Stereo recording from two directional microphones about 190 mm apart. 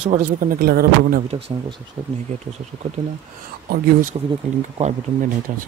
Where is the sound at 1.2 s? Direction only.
30° right (ahead or behind).